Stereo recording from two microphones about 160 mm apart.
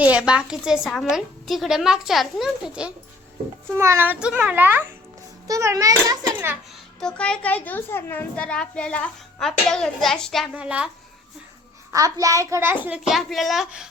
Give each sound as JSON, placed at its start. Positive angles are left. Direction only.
{"t": 0.0, "sound": "a child's voice", "side_deg": -5}
{"t": 3.8, "sound": "a child's voice", "side_deg": -15}
{"t": 7.0, "sound": "a child's voice", "side_deg": 5}
{"t": 11.9, "sound": "a child's voice", "side_deg": -20}